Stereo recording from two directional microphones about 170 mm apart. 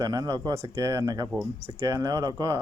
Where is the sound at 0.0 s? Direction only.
20° right (ahead or behind).